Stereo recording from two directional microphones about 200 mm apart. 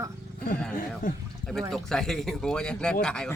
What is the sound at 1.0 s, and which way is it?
Speech, 45° left (ahead or behind).